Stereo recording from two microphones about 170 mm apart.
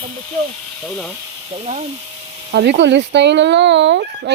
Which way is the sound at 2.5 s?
80° right.